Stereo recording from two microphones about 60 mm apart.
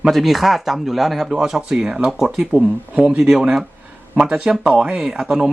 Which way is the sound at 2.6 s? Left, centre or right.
Right.